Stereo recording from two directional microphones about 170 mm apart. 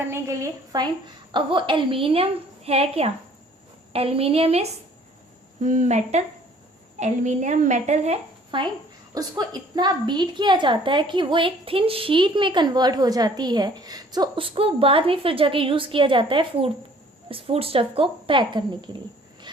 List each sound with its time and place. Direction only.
0.1 s a woman's voice: 20° right (ahead or behind); by 4.6 s 35° right (ahead or behind)
5.6 s a woman's voice: 45° right (ahead or behind); by 19.5 s 25° right (ahead or behind)